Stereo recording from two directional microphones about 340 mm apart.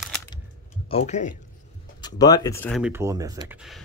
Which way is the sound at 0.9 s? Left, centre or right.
Centre.